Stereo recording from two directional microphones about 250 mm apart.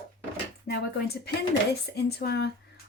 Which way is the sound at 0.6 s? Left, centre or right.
Left.